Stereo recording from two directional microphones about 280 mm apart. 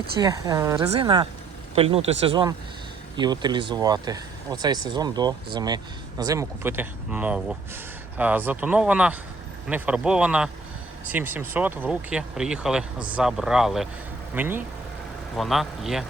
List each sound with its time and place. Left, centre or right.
0.2 s speech: centre